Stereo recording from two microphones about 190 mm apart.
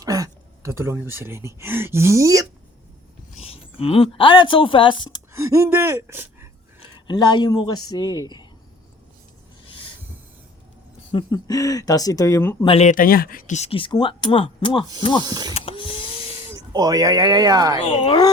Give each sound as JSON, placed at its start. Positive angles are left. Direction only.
{"t": 0.0, "sound": "speech", "side_deg": -20}
{"t": 3.3, "sound": "speech", "side_deg": 30}
{"t": 5.3, "sound": "speech", "side_deg": -15}
{"t": 6.7, "sound": "speech", "side_deg": 25}
{"t": 11.1, "sound": "speech", "side_deg": 25}
{"t": 12.6, "sound": "speech", "side_deg": 35}
{"t": 15.2, "sound": "speech", "side_deg": -20}
{"t": 15.5, "sound": "a sound", "side_deg": 30}
{"t": 16.6, "sound": "speech", "side_deg": -20}
{"t": 17.7, "sound": "speech", "side_deg": 30}